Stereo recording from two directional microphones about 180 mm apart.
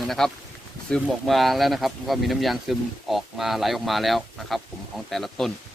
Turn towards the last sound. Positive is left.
turn(degrees=0)  # may be behind; listen again after turning